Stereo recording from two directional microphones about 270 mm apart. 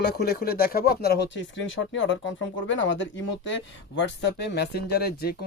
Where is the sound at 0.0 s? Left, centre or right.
Left.